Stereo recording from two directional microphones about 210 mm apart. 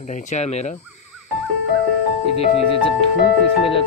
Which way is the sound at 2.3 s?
25° left (ahead or behind).